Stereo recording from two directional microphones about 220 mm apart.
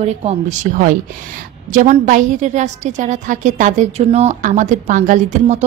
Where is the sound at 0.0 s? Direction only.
30° right (ahead or behind).